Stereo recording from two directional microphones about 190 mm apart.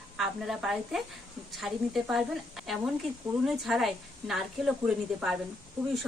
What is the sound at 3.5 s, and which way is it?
A woman's voice, centre (ahead or behind).